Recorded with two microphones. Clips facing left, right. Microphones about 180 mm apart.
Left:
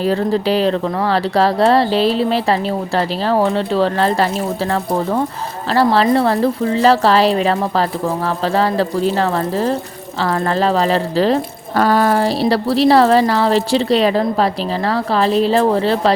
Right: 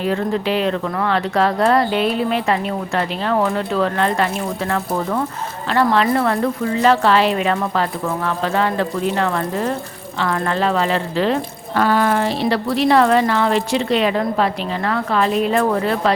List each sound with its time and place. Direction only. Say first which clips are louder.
0.0 s speech: left 3 dB; 35° left (ahead or behind)